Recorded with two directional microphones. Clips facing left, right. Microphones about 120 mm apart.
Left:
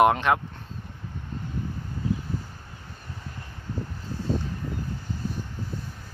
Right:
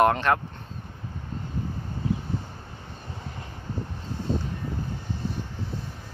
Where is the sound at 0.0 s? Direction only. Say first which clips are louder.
Left 1 dB; 10° left (ahead or behind).